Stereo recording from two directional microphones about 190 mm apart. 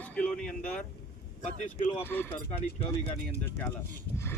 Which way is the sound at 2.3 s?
30° left (ahead or behind).